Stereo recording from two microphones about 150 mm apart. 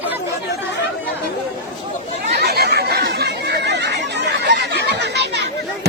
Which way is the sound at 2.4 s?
90° right.